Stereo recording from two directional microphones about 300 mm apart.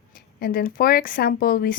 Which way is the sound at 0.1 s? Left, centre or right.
Left.